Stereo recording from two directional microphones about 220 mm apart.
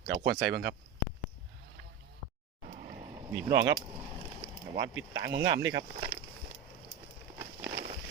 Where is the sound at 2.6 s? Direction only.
35° right (ahead or behind).